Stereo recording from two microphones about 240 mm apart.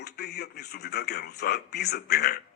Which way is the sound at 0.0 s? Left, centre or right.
Left.